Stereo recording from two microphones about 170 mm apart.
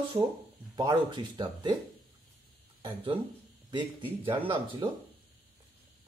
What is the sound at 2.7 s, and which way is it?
Speech, 30° right (ahead or behind).